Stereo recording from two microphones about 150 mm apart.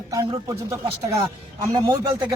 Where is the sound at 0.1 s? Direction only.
25° right (ahead or behind).